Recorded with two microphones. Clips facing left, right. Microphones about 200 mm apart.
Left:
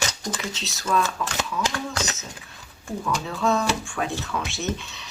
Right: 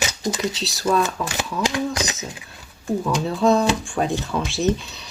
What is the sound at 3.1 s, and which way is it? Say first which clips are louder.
Speech: right 5 dB; 30° right (ahead or behind).